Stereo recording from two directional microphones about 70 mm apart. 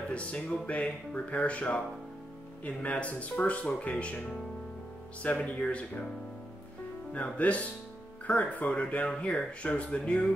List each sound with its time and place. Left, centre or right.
0.1 s speech: centre
5.2 s speech: centre
7.1 s speech: centre